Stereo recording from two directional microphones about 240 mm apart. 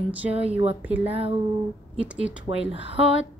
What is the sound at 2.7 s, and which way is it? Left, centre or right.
Speech, right.